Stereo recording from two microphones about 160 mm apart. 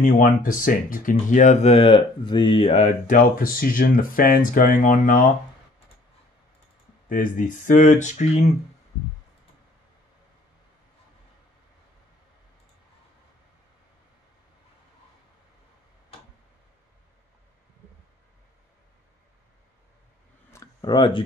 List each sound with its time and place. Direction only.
0.0 s speech: 60° left (ahead or behind)
7.1 s speech: 60° left (ahead or behind)
20.5 s a sound: 25° left (ahead or behind)